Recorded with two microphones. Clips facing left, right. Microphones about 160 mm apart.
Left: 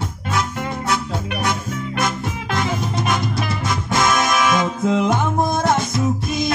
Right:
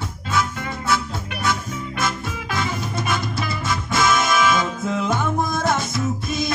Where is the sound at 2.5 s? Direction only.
15° left (ahead or behind).